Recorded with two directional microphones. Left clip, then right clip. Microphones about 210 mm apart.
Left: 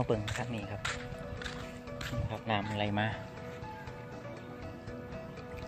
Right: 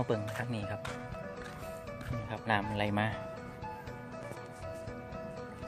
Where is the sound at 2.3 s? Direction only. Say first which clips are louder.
Right 3 dB; 20° right (ahead or behind).